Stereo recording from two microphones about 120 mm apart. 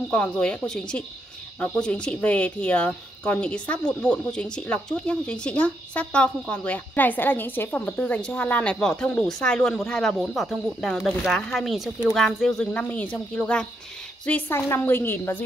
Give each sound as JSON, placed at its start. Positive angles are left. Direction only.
{"t": 0.1, "sound": "a woman's voice", "side_deg": 10}